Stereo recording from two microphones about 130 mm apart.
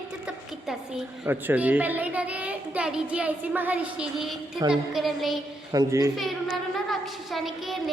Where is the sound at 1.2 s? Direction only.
15° right (ahead or behind).